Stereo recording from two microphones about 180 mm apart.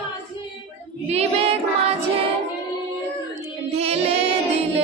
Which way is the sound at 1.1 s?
35° right (ahead or behind).